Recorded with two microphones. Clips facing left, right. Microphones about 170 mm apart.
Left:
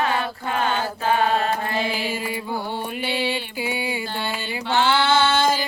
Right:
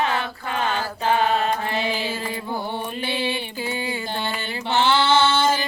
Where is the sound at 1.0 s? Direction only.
20° right (ahead or behind).